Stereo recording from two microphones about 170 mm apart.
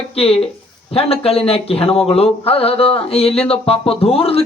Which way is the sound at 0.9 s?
35° left (ahead or behind).